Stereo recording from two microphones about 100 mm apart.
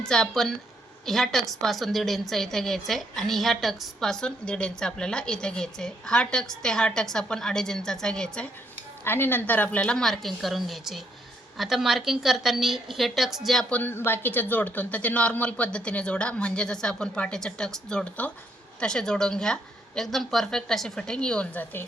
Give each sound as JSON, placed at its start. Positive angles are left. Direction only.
{"t": 0.0, "sound": "a woman's voice", "side_deg": 5}
{"t": 9.0, "sound": "a woman's voice", "side_deg": 20}
{"t": 13.7, "sound": "a woman's voice", "side_deg": 15}